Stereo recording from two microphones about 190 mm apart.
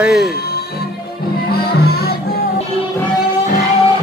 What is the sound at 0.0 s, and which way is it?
Speech, 5° right (ahead or behind).